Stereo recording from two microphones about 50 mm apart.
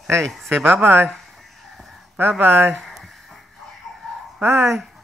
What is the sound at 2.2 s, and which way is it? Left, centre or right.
Speech, right.